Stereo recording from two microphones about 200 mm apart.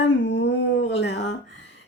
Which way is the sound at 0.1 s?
65° left (ahead or behind).